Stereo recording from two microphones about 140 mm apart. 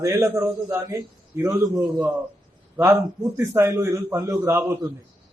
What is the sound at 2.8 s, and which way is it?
A man's voice, 15° right (ahead or behind).